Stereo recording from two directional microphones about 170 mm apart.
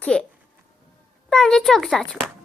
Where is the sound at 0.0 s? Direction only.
5° left (ahead or behind).